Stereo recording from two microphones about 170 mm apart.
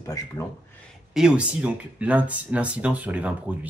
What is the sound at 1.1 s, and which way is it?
Speech, 5° right (ahead or behind).